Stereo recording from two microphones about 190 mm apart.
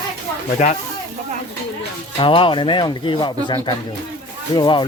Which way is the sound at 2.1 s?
25° left (ahead or behind).